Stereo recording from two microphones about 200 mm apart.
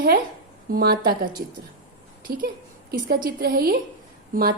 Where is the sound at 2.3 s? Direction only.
45° right (ahead or behind).